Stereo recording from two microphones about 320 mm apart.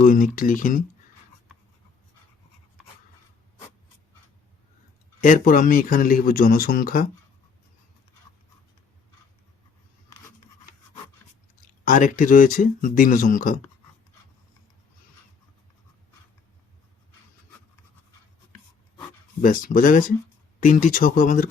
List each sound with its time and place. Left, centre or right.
0.0 s speech: left
5.2 s speech: left
11.9 s speech: left
19.4 s speech: left